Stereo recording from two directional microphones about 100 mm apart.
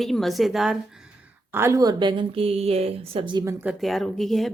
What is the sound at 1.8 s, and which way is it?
A woman's voice, 50° right (ahead or behind).